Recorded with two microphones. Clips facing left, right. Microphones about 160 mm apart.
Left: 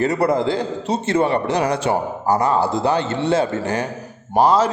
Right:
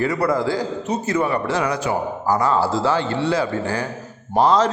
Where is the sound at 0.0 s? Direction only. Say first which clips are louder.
Left 2 dB; 25° left (ahead or behind).